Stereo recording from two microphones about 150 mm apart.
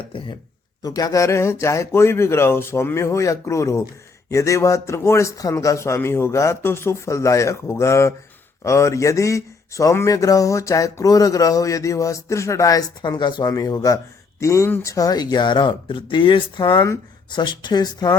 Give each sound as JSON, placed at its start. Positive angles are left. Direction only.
{"t": 0.8, "sound": "speech", "side_deg": 25}